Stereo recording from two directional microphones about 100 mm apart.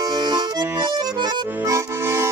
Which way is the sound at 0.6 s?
25° right (ahead or behind).